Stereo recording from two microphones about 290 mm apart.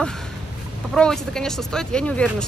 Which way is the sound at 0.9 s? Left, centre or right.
Centre.